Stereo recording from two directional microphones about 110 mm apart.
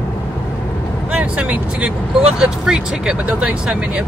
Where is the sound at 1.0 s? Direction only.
15° right (ahead or behind).